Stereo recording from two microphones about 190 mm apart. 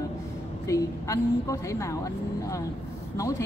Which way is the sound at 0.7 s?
15° left (ahead or behind).